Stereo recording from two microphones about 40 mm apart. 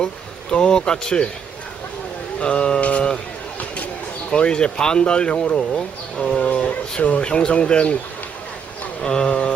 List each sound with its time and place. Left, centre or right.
0.5 s speech: centre
2.4 s speech: left
4.3 s speech: left
6.4 s speech: left
9.0 s speech: centre